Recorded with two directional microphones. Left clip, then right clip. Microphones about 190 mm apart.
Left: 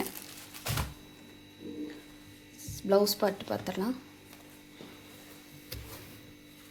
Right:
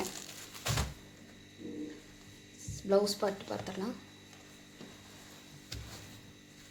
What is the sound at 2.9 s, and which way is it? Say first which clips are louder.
Speech: left 3 dB; 40° left (ahead or behind).